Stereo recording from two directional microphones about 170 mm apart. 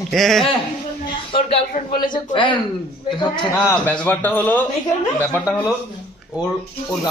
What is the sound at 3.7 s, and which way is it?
Speech, 10° left (ahead or behind).